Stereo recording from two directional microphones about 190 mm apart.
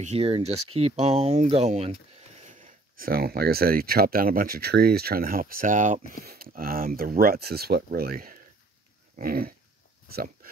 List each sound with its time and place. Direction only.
0.0 s speech: 35° right (ahead or behind)
3.0 s speech: 55° right (ahead or behind)
10.0 s a sound: 50° right (ahead or behind)